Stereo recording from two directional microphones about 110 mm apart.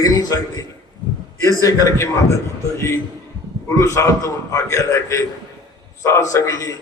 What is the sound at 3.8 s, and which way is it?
A man's voice, 30° left (ahead or behind).